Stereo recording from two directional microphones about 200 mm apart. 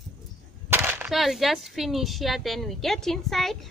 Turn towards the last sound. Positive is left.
turn(degrees=0)  # may be behind; listen again after turning